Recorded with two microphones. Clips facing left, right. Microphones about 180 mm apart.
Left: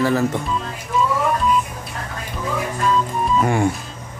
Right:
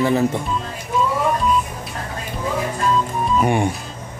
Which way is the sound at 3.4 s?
20° right (ahead or behind).